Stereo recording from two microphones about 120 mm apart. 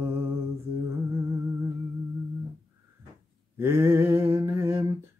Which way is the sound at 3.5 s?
20° right (ahead or behind).